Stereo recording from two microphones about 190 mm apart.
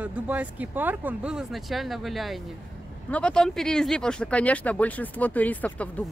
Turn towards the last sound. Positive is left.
turn(degrees=10)  # may be behind; listen again after turning